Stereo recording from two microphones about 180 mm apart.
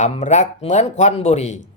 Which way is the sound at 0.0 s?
40° left (ahead or behind).